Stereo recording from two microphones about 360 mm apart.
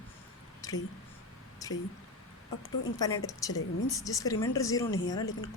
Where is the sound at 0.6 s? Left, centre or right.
Centre.